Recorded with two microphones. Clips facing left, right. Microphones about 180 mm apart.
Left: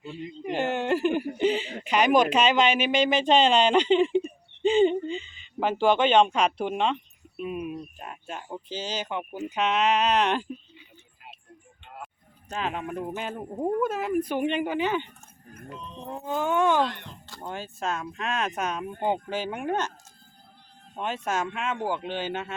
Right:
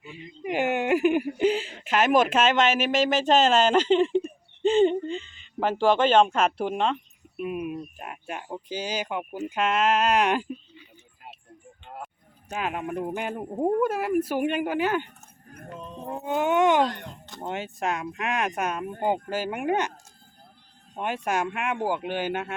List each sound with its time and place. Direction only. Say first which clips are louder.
0.0 s a sound: left 2 dB; 10° right (ahead or behind)
1.4 s speech: right 1 dB; 5° right (ahead or behind)
12.5 s speech: right 1 dB; 10° right (ahead or behind)
16.1 s speech: right 3 dB; 15° right (ahead or behind)
20.9 s speech: right 2 dB; 15° right (ahead or behind)